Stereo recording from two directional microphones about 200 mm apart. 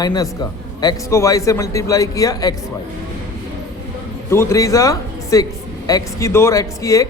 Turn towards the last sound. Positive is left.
turn(degrees=15)  # may be behind; listen again after turning